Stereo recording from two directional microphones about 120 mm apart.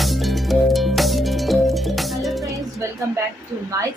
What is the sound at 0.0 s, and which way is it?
Music, centre (ahead or behind).